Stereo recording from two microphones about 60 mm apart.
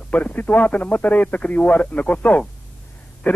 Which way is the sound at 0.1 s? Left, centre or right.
Left.